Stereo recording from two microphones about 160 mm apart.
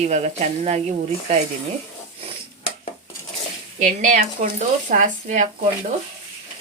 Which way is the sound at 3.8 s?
50° right (ahead or behind).